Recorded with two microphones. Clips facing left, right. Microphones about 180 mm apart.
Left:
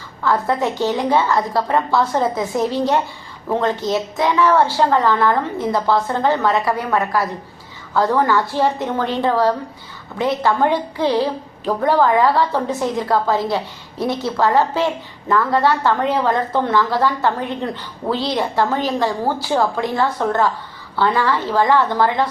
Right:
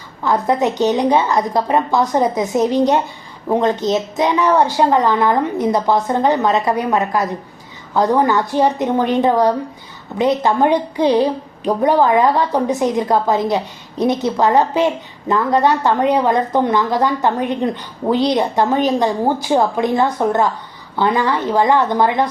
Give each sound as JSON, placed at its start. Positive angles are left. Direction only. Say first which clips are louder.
{"t": 0.2, "sound": "a woman's voice", "louder": "right 2 dB", "side_deg": -20}